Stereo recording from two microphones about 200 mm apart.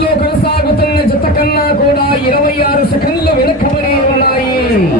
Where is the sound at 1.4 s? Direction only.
50° left (ahead or behind).